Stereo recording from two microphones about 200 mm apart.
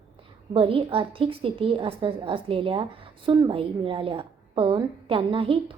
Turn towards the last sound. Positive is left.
turn(degrees=-25)  # may be behind; listen again after turning